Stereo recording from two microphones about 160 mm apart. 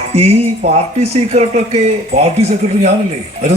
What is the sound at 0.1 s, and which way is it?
Speech, 40° right (ahead or behind).